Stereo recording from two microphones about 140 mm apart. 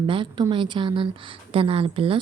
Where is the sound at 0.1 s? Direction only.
35° right (ahead or behind).